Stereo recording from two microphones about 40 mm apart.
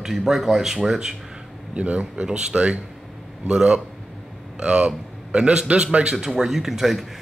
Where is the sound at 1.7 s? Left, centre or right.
Right.